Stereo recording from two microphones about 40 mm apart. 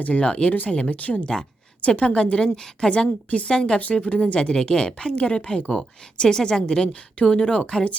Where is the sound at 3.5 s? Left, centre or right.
Centre.